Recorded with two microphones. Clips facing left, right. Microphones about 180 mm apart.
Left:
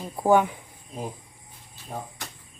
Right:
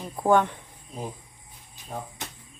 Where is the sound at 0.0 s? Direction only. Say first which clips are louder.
Left 1 dB; 10° left (ahead or behind).